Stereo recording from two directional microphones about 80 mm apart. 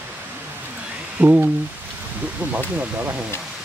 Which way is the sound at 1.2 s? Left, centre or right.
Centre.